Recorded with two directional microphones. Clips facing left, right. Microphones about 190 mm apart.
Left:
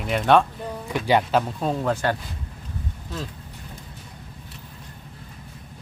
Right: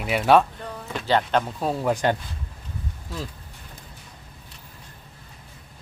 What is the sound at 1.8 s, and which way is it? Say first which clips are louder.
Speech: right 3 dB; 15° right (ahead or behind).